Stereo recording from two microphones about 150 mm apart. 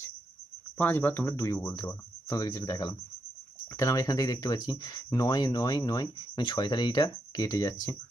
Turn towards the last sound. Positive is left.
turn(degrees=20)  # may be behind; listen again after turning